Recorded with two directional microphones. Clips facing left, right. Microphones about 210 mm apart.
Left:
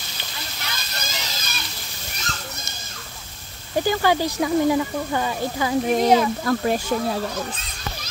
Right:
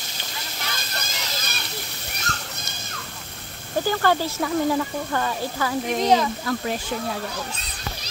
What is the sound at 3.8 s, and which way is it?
Speech, 15° left (ahead or behind).